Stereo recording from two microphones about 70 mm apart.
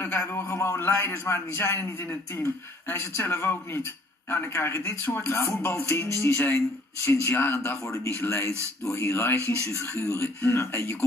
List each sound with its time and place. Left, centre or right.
0.0 s a man's voice: left
7.7 s a man's voice: left
9.4 s speech: right
9.8 s a man's voice: left